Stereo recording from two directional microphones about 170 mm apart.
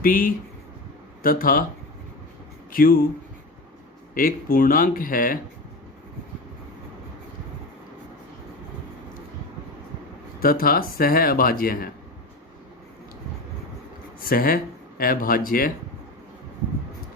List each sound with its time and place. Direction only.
0.0 s speech: 55° left (ahead or behind)
2.7 s speech: 55° left (ahead or behind)
4.1 s speech: 55° left (ahead or behind)
10.4 s speech: 60° left (ahead or behind)
14.2 s speech: 55° left (ahead or behind)